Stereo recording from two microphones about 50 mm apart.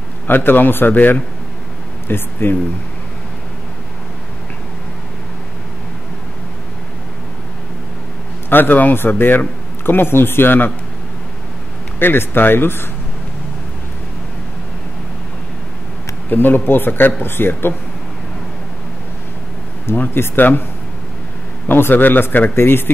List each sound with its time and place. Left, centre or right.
0.3 s a man's voice: left
8.5 s a man's voice: left
12.0 s speech: left
16.3 s speech: left
20.2 s speech: left
21.6 s speech: left